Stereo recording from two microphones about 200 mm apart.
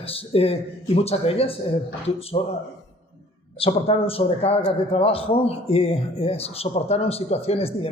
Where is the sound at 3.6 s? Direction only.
30° left (ahead or behind).